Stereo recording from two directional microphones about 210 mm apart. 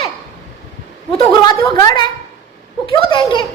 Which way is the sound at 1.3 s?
20° left (ahead or behind).